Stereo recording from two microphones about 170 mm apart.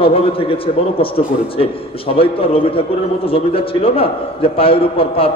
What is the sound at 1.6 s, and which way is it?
A man's voice, 35° left (ahead or behind).